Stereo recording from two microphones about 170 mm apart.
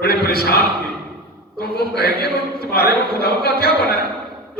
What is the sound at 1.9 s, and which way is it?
Speech, 65° left (ahead or behind).